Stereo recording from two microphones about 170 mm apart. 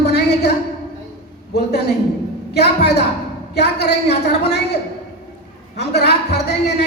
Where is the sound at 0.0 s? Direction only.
75° left (ahead or behind).